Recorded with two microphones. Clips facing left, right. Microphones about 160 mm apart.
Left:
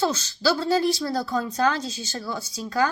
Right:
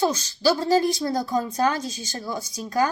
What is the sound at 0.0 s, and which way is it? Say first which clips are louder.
A woman's voice: right 2 dB; 15° right (ahead or behind).